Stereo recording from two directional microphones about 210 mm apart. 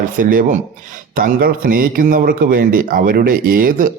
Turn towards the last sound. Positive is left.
turn(degrees=-40)  # may be behind; listen again after turning